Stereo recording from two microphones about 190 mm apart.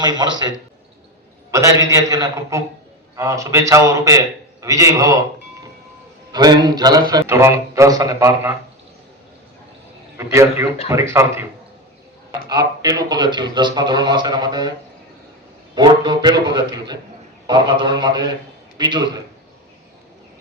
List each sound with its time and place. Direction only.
0.0 s a man's voice: 20° right (ahead or behind)
6.3 s a man's voice: 20° right (ahead or behind)
10.2 s speech: 15° right (ahead or behind)
12.5 s a man's voice: 20° right (ahead or behind)
15.7 s a man's voice: 20° right (ahead or behind)